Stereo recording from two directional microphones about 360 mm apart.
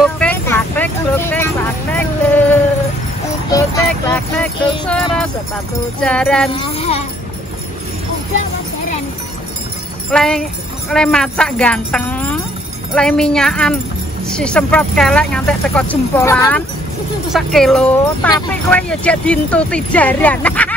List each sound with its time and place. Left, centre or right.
0.0 s vehicle: centre
4.1 s a sound: centre
5.9 s speech: centre
6.5 s a sound: centre
10.1 s jingle bell: centre
10.9 s speech: centre